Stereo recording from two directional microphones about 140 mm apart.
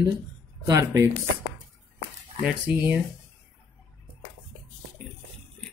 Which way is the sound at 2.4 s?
10° right (ahead or behind).